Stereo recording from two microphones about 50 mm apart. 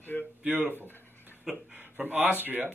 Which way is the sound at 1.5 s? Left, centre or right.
Right.